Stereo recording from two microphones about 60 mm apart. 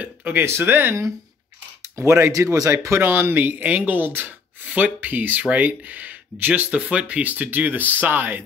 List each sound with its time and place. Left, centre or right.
0.0 s a sound: right
0.5 s speech: right
2.0 s speech: right
6.7 s speech: centre; by 8.4 s right